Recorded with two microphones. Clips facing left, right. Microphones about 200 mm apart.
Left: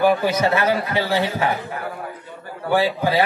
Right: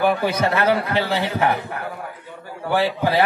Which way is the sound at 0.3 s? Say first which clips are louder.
Even; 60° right (ahead or behind).